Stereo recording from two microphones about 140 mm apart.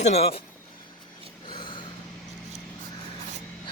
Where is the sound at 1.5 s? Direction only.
35° left (ahead or behind).